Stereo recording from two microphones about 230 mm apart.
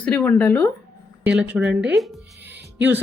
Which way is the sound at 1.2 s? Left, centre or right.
Centre.